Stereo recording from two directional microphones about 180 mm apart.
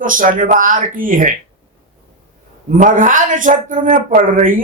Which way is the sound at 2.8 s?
45° right (ahead or behind).